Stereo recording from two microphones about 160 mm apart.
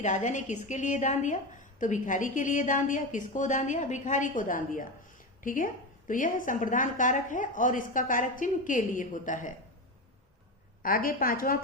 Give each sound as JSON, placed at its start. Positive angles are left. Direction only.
{"t": 0.0, "sound": "a woman's voice", "side_deg": 50}
{"t": 10.8, "sound": "a woman's voice", "side_deg": 65}